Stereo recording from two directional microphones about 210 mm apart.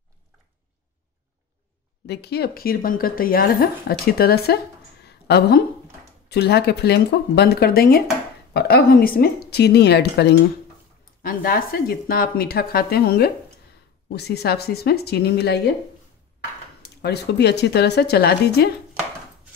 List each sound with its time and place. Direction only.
2.0 s a woman's voice: 50° left (ahead or behind)
5.0 s a sound: 50° left (ahead or behind)
6.2 s a woman's voice: 50° left (ahead or behind)
17.0 s a woman's voice: 50° left (ahead or behind)